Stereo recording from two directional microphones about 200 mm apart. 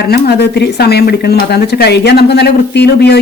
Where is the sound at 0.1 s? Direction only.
55° left (ahead or behind).